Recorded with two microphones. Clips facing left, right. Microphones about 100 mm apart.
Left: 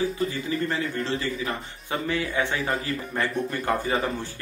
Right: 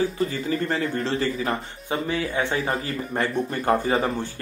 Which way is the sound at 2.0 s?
25° right (ahead or behind).